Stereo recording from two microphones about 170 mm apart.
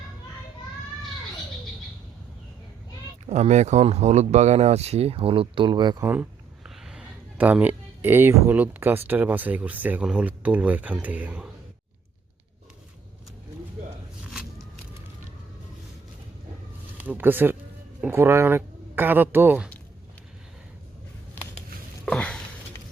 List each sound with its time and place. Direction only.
3.2 s speech: 45° right (ahead or behind); by 6.0 s 25° right (ahead or behind)
6.0 s speech: 10° right (ahead or behind)
17.0 s speech: 10° right (ahead or behind)
22.0 s a sound: 5° left (ahead or behind)